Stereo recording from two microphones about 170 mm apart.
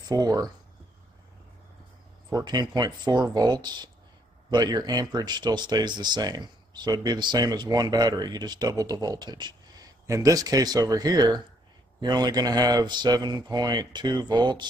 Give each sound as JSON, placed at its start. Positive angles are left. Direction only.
{"t": 0.1, "sound": "speech", "side_deg": -20}
{"t": 2.3, "sound": "speech", "side_deg": -25}